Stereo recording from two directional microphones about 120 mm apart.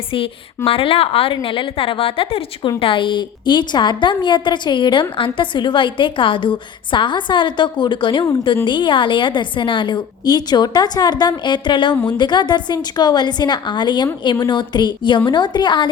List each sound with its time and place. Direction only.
0.1 s a woman's voice: 50° left (ahead or behind)